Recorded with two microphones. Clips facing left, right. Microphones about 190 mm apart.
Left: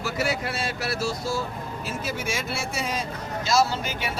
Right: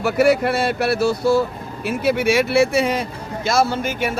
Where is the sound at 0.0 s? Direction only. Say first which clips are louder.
Right 11 dB; 60° right (ahead or behind).